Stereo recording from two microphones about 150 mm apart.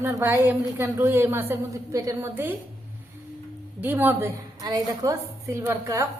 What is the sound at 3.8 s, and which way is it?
A woman's voice, 15° right (ahead or behind).